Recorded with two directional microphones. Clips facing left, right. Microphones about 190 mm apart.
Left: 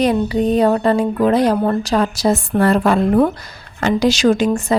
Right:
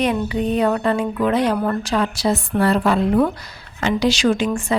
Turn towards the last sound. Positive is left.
turn(degrees=40)  # may be behind; listen again after turning